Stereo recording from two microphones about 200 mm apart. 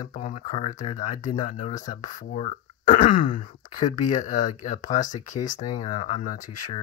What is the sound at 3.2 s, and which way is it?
Speech, 25° left (ahead or behind).